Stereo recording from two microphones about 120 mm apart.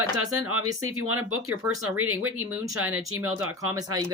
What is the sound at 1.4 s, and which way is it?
Speech, 20° right (ahead or behind).